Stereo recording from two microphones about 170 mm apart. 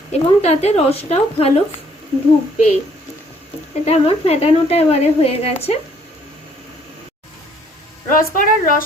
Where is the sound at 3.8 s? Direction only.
35° left (ahead or behind).